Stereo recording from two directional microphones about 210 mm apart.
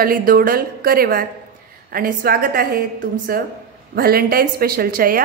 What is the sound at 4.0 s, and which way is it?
A woman's voice, 45° right (ahead or behind).